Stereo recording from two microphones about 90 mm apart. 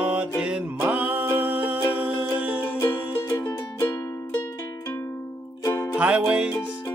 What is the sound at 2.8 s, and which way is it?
Music, 35° left (ahead or behind).